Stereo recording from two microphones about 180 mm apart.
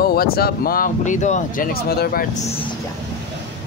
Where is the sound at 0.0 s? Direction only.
60° left (ahead or behind).